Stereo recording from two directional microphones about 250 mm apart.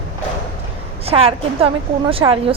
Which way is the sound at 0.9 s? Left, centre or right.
Right.